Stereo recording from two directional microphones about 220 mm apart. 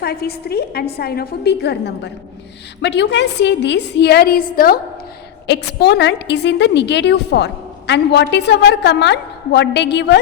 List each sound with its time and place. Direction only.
0.0 s a woman's voice: 45° left (ahead or behind)